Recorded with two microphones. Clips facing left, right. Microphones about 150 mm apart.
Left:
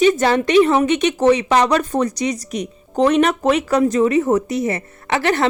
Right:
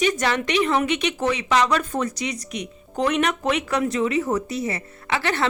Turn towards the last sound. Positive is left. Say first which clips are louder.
# left 6 dB
turn(degrees=40)  # may be behind; listen again after turning